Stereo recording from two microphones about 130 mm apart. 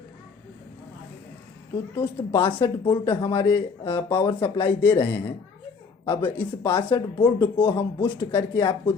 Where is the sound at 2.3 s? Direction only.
40° left (ahead or behind).